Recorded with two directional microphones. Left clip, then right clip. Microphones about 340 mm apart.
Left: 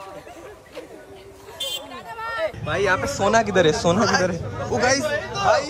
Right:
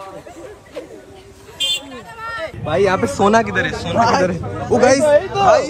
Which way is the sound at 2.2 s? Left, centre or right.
Left.